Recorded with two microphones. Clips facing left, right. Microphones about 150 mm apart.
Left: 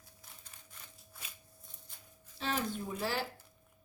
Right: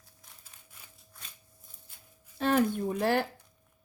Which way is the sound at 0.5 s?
5° left (ahead or behind).